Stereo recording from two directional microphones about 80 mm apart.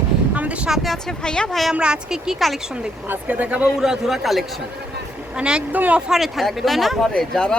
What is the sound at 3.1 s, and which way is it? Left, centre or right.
Speech, centre.